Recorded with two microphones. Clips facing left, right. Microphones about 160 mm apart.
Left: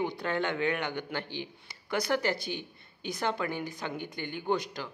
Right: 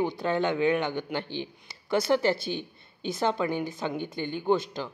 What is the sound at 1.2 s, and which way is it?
Speech, 15° left (ahead or behind).